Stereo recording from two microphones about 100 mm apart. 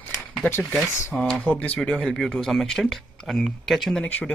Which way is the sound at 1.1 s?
5° left (ahead or behind).